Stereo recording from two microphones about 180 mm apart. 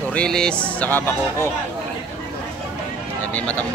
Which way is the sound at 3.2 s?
10° left (ahead or behind).